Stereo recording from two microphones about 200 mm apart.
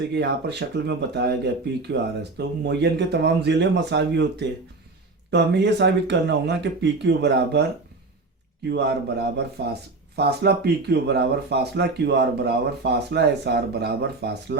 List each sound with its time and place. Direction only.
0.1 s speech: 55° right (ahead or behind)
2.4 s speech: 55° right (ahead or behind)
8.7 s speech: 55° right (ahead or behind)